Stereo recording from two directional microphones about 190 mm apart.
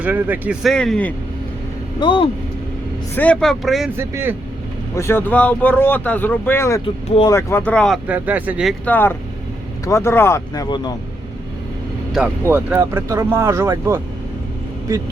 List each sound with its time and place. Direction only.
0.0 s speech: 10° right (ahead or behind)
0.7 s speech: 5° left (ahead or behind)
2.0 s speech: 25° left (ahead or behind)
3.2 s speech: 5° left (ahead or behind)
3.9 s speech: 10° right (ahead or behind)
4.9 s speech: 10° left (ahead or behind)
8.0 s speech: 10° right (ahead or behind)
8.8 s speech: 10° left (ahead or behind)
12.4 s speech: 10° right (ahead or behind)